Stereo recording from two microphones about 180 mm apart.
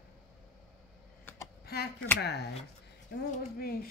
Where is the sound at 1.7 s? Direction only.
60° left (ahead or behind).